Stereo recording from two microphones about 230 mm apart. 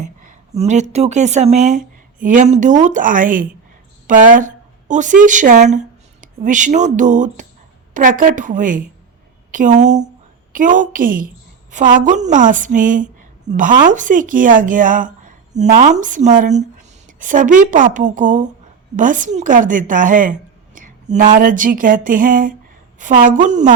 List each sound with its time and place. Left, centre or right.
0.0 s a woman's voice: right